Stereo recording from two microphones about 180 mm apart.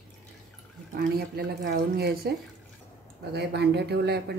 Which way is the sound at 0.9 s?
60° right (ahead or behind).